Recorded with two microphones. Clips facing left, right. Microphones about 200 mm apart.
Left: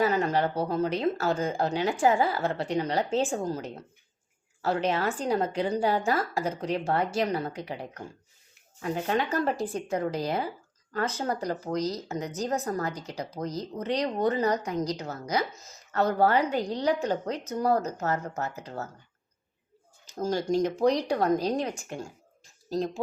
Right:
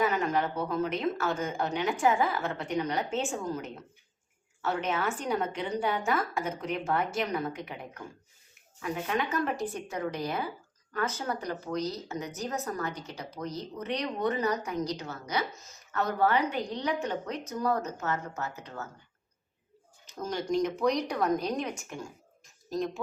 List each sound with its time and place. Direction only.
0.0 s a woman's voice: 35° left (ahead or behind)
20.1 s a woman's voice: 30° left (ahead or behind)